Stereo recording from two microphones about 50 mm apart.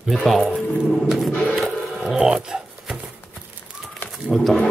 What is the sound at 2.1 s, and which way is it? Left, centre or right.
Dog, centre.